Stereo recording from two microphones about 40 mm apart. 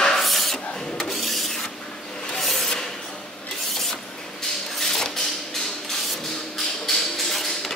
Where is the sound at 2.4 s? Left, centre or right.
Centre.